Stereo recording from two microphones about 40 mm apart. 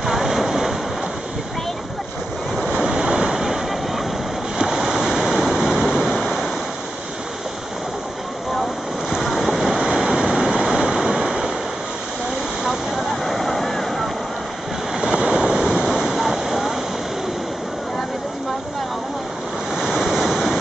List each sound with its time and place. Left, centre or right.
0.0 s waves: centre
2.6 s waves: centre
4.7 s waterfall: centre
9.1 s boat: centre
9.8 s waterfall: centre
11.2 s waves: centre
13.2 s a sound: centre
15.1 s waves: right
15.4 s waterfall: centre
19.7 s waves: centre